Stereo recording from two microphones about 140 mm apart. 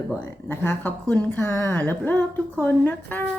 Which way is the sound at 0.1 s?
15° left (ahead or behind).